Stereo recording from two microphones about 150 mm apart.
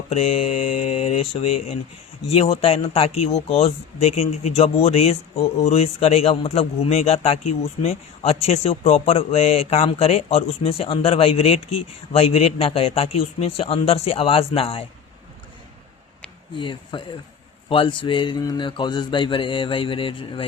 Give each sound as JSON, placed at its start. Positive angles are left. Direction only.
{"t": 0.1, "sound": "a man's voice", "side_deg": 45}
{"t": 16.6, "sound": "a man's voice", "side_deg": 35}